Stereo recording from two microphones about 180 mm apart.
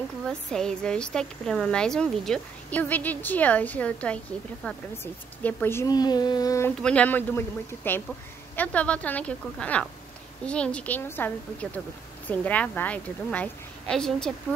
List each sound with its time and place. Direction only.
0.3 s speech: 5° left (ahead or behind); by 6.7 s 20° left (ahead or behind)
6.8 s speech: 5° left (ahead or behind)